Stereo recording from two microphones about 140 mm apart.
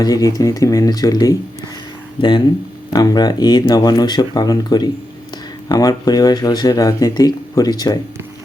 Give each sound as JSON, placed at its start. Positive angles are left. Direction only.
{"t": 0.0, "sound": "speech", "side_deg": 25}
{"t": 2.9, "sound": "speech", "side_deg": 30}